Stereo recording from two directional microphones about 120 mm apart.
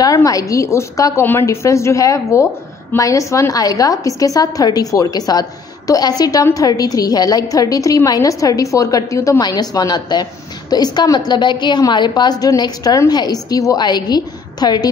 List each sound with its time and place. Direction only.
0.0 s a woman's voice: 30° left (ahead or behind)